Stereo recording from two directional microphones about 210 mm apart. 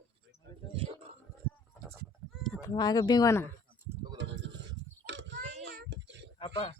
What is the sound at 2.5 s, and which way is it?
Speech, 20° left (ahead or behind).